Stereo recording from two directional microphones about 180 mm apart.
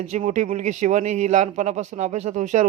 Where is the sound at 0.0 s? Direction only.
45° right (ahead or behind).